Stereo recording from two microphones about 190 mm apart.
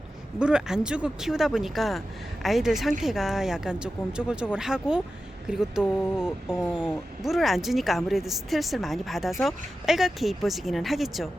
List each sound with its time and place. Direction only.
0.3 s speech: 5° right (ahead or behind)